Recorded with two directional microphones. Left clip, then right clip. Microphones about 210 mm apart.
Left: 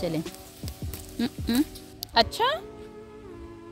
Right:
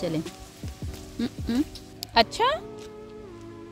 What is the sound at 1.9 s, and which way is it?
Speech, 5° right (ahead or behind).